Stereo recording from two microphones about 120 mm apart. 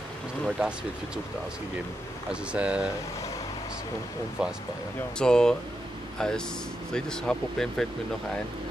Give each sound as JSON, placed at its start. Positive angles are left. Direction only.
{"t": 0.6, "sound": "speech", "side_deg": -10}
{"t": 2.5, "sound": "speech", "side_deg": -10}
{"t": 4.4, "sound": "speech", "side_deg": -5}
{"t": 5.2, "sound": "speech", "side_deg": 5}